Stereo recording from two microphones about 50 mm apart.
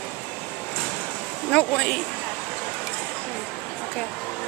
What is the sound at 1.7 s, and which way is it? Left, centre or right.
Speech, centre.